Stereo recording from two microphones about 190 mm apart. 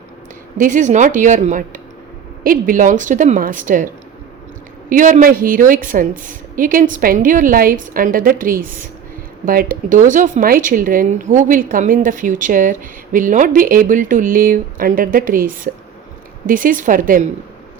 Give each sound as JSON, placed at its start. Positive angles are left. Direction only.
{"t": 0.5, "sound": "a woman's voice", "side_deg": -40}
{"t": 4.9, "sound": "a woman's voice", "side_deg": -45}